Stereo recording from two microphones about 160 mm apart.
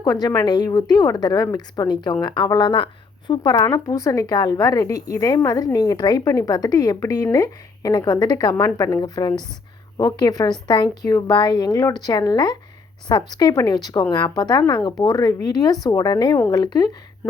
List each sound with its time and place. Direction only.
0.0 s speech: 25° left (ahead or behind)